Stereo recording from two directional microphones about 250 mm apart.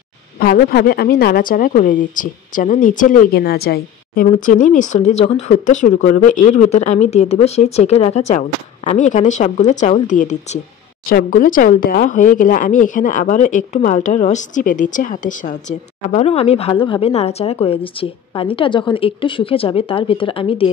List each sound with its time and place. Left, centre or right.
0.4 s a woman's voice: left